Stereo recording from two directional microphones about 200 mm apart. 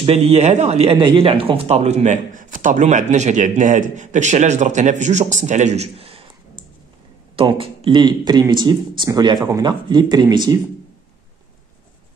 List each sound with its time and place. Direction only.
0.0 s a man's voice: 30° right (ahead or behind)